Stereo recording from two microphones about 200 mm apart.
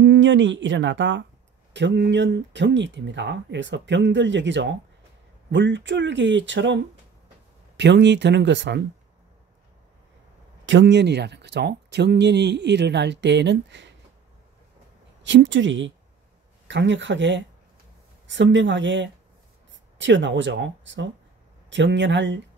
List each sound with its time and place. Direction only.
0.0 s speech: 65° right (ahead or behind)
10.6 s speech: 65° right (ahead or behind)
15.2 s speech: 65° right (ahead or behind)